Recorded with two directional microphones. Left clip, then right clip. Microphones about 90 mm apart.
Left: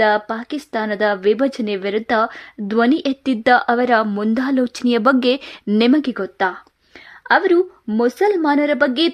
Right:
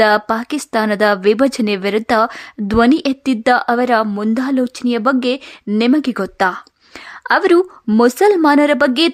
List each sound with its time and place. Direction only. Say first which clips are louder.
0.0 s a woman's voice: right 4 dB; 40° right (ahead or behind); by 6.0 s centre (ahead or behind)
6.1 s speech: right 4 dB; 35° right (ahead or behind)
7.3 s speech: right 2 dB; 55° right (ahead or behind); by 9.1 s 25° right (ahead or behind)